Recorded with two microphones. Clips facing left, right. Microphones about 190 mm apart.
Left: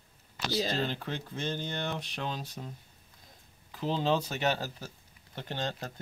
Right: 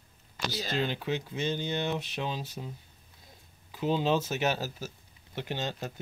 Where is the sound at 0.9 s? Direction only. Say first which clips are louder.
Right 4 dB; 5° right (ahead or behind).